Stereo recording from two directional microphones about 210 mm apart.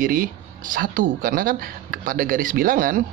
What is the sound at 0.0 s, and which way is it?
Speech, 40° right (ahead or behind).